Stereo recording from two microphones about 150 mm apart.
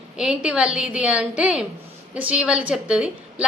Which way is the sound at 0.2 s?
5° right (ahead or behind).